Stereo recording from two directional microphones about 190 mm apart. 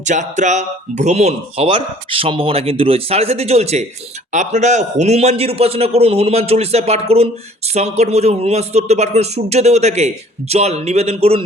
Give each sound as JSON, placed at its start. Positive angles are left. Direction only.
{"t": 0.0, "sound": "speech", "side_deg": -40}